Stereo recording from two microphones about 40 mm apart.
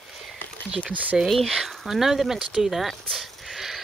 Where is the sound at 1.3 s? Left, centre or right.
Centre.